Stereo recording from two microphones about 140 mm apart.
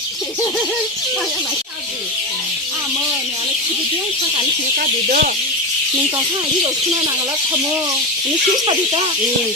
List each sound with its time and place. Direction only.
4.8 s speech: 85° right